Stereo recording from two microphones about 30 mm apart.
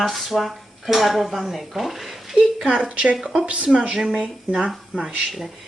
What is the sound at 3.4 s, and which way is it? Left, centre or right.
Speech, right.